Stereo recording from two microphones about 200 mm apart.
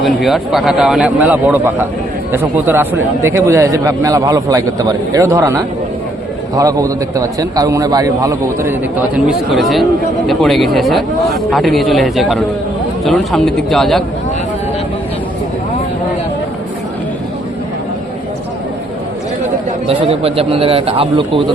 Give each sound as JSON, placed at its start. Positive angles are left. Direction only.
{"t": 0.0, "sound": "speech", "side_deg": 0}
{"t": 9.1, "sound": "speech", "side_deg": -5}
{"t": 19.9, "sound": "a man's voice", "side_deg": -30}